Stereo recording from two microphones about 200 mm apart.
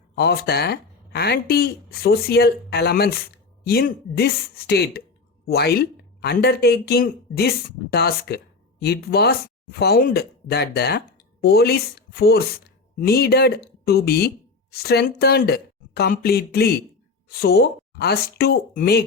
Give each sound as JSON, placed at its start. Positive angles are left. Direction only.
{"t": 0.2, "sound": "speech", "side_deg": 55}